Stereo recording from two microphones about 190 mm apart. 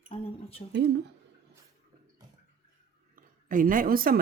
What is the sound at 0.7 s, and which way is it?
Speech, 65° right (ahead or behind).